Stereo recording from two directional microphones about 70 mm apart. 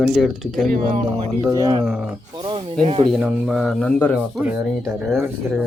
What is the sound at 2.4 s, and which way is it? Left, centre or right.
Speech, right.